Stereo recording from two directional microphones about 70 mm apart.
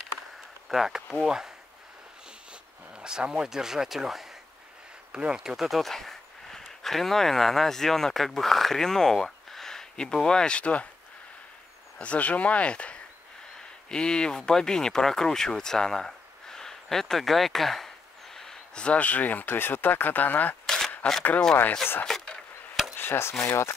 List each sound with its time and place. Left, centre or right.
0.7 s speech: centre
3.0 s speech: centre
12.0 s speech: centre
20.6 s a sound: centre
22.0 s a sound: centre
22.9 s chopping: left
23.4 s speech: left